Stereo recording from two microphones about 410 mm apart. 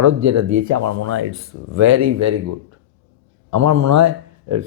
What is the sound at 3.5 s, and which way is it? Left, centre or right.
Speech, right.